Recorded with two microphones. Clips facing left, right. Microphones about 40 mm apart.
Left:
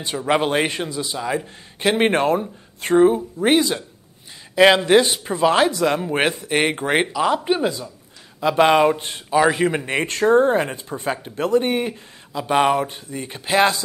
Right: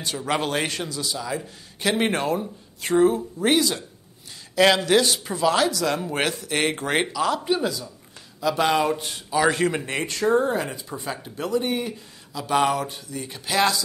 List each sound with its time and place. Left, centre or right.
0.2 s speech: left
3.0 s speech: left
9.4 s speech: centre
10.0 s speech: left